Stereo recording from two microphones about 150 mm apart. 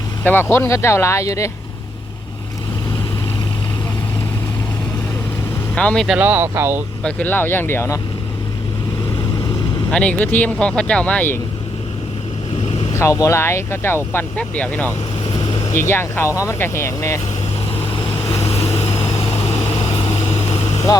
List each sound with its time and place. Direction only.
0.5 s speech: 15° left (ahead or behind)
5.7 s speech: 5° left (ahead or behind)
6.1 s speech: 10° right (ahead or behind)
7.0 s speech: 10° left (ahead or behind)
9.9 s speech: 10° left (ahead or behind)
13.0 s speech: 20° left (ahead or behind)
15.3 s vehicle: 30° left (ahead or behind)
15.6 s speech: 20° left (ahead or behind)
17.9 s vehicle: 45° left (ahead or behind)
20.9 s speech: 25° left (ahead or behind)